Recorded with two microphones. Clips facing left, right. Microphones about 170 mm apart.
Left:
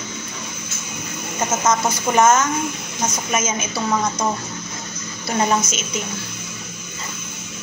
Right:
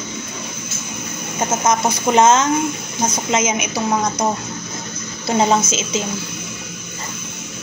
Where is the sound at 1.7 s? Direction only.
20° right (ahead or behind).